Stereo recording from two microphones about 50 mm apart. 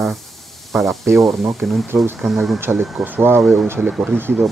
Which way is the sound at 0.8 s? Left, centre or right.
Right.